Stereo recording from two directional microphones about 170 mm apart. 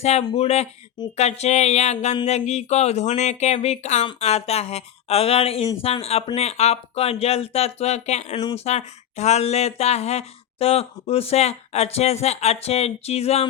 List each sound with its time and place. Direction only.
0.0 s speech: 40° left (ahead or behind)